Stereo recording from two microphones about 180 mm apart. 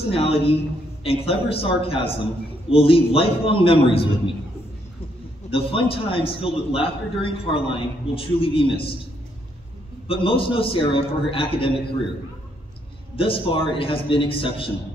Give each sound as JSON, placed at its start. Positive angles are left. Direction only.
{"t": 0.1, "sound": "a man's voice", "side_deg": 30}
{"t": 5.5, "sound": "a man's voice", "side_deg": 30}
{"t": 10.0, "sound": "a man's voice", "side_deg": 30}
{"t": 13.1, "sound": "a man's voice", "side_deg": 30}